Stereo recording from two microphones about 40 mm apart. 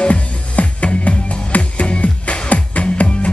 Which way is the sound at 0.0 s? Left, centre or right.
Left.